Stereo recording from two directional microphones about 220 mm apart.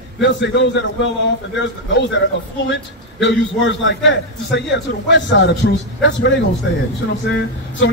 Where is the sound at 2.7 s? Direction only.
55° left (ahead or behind).